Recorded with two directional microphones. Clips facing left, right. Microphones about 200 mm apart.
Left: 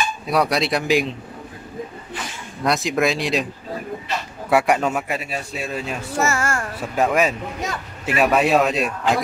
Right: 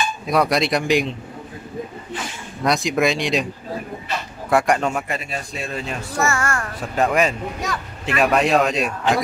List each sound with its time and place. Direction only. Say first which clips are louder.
0.3 s a man's voice: right 1 dB; centre (ahead or behind)
2.6 s a man's voice: right 1 dB; centre (ahead or behind)
4.5 s a man's voice: even; 5° left (ahead or behind)
6.1 s a child's voice: even; 25° left (ahead or behind)
6.8 s a man's voice: even; 5° left (ahead or behind)